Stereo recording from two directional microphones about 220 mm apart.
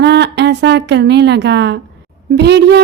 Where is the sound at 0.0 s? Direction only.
50° right (ahead or behind).